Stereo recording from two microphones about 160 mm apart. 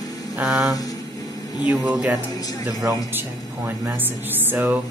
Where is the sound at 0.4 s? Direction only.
Centre (ahead or behind).